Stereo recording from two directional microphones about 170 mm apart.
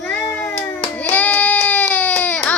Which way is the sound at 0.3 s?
10° left (ahead or behind).